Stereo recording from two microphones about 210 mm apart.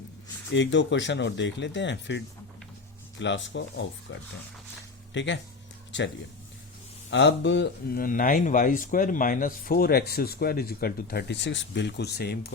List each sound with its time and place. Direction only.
0.5 s speech: 60° left (ahead or behind)
7.1 s speech: 55° left (ahead or behind)